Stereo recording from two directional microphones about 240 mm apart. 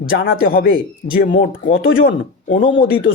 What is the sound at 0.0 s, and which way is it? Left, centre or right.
A man's voice, left.